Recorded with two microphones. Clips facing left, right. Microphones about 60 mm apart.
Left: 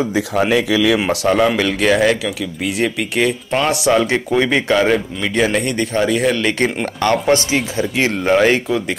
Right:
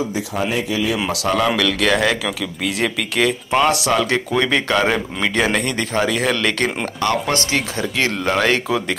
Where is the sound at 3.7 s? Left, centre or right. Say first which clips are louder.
Left 3 dB; left.